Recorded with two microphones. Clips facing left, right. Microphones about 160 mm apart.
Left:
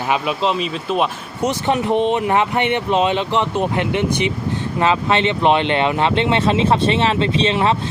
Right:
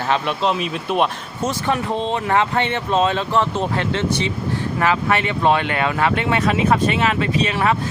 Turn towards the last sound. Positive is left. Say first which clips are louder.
# left 2 dB
turn(degrees=25)  # may be behind; listen again after turning